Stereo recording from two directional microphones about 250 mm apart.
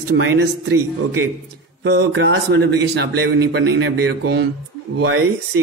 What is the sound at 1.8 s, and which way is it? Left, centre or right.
Speech, right.